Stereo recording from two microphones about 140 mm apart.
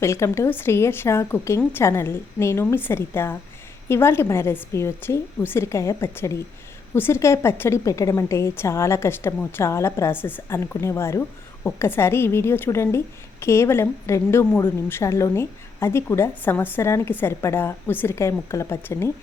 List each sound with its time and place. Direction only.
0.0 s a woman's voice: 20° left (ahead or behind)